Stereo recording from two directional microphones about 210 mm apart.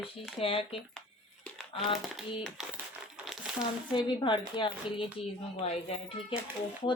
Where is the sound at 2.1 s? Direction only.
Centre (ahead or behind).